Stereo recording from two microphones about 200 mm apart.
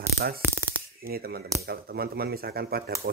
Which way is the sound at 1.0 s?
50° right (ahead or behind).